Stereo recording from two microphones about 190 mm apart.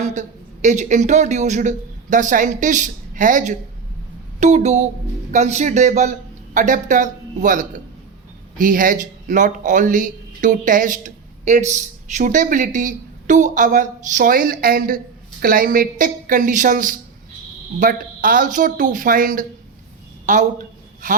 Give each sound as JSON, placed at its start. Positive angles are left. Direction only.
{"t": 0.0, "sound": "a woman's voice", "side_deg": -40}